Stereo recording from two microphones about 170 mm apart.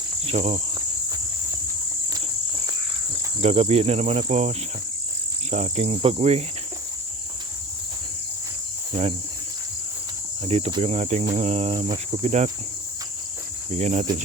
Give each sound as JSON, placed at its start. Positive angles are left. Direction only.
{"t": 0.3, "sound": "cricket", "side_deg": -40}
{"t": 3.4, "sound": "cricket", "side_deg": -35}
{"t": 10.4, "sound": "cricket", "side_deg": -35}
{"t": 13.7, "sound": "cricket", "side_deg": -40}